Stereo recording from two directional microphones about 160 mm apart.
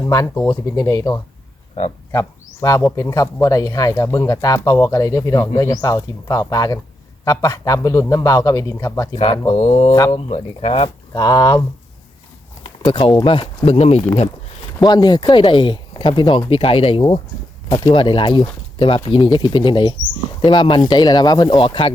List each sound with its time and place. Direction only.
0.0 s speech: 20° left (ahead or behind)
9.1 s speech: 40° left (ahead or behind)
10.8 s speech: 25° left (ahead or behind)
12.6 s speech: 30° left (ahead or behind)
14.8 s speech: 25° left (ahead or behind)